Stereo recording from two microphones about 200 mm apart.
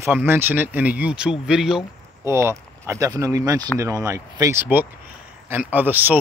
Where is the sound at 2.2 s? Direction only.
15° right (ahead or behind).